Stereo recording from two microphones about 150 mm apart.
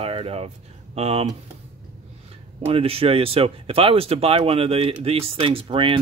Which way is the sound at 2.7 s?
40° right (ahead or behind).